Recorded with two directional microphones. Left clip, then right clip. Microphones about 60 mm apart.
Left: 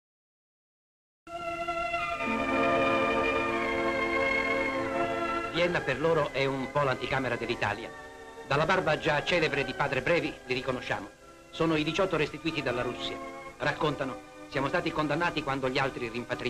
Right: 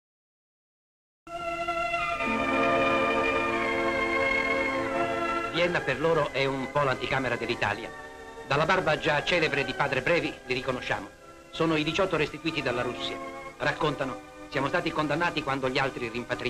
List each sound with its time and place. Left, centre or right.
1.3 s music: right
8.5 s a man's voice: right